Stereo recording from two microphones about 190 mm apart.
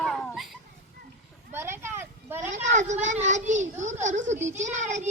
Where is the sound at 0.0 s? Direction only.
Centre (ahead or behind).